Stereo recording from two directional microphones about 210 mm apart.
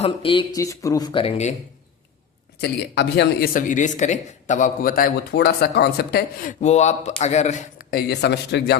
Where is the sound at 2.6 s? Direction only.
55° left (ahead or behind); by 8.0 s 35° left (ahead or behind).